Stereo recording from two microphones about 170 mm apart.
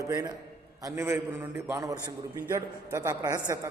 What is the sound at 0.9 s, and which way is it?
A man's voice, 15° right (ahead or behind).